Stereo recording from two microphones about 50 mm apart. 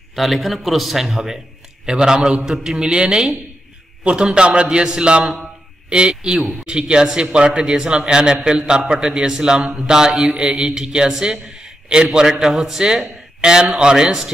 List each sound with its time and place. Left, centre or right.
0.1 s a man's voice: centre; by 5.3 s right
5.4 s mantra: centre
6.6 s a man's voice: centre